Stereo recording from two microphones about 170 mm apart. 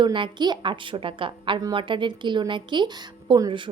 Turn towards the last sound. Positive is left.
turn(degrees=-30)  # may be behind; listen again after turning